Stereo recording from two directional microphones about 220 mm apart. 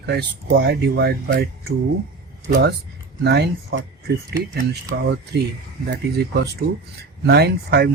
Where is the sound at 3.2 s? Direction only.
50° right (ahead or behind).